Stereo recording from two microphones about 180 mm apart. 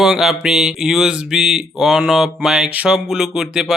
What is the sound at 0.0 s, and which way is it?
Speech, centre (ahead or behind).